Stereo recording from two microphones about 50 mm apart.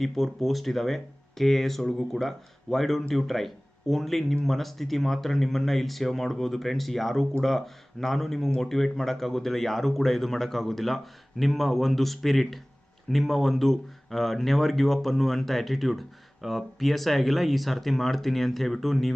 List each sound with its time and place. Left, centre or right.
0.0 s speech: centre